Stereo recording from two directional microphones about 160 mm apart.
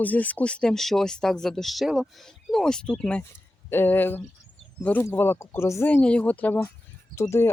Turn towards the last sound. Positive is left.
turn(degrees=15)  # may be behind; listen again after turning